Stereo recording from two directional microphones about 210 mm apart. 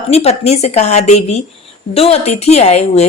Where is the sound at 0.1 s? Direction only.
30° left (ahead or behind).